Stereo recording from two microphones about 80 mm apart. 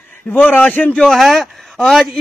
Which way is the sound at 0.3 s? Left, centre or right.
Left.